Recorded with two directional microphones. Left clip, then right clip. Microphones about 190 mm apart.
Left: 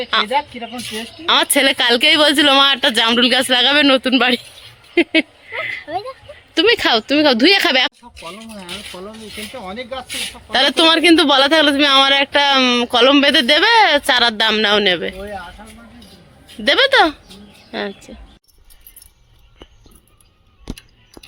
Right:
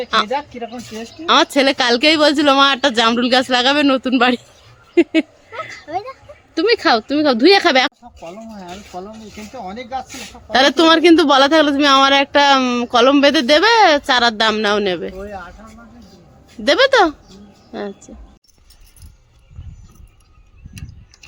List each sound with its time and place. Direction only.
0.3 s speech: 45° right (ahead or behind)
1.2 s a man's voice: centre (ahead or behind)
5.9 s speech: 25° left (ahead or behind)
6.5 s a man's voice: 5° left (ahead or behind)
8.2 s speech: 50° right (ahead or behind)
10.5 s a man's voice: 10° right (ahead or behind)
16.6 s a man's voice: 5° right (ahead or behind)